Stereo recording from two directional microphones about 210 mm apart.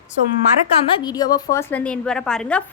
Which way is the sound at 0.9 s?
20° left (ahead or behind).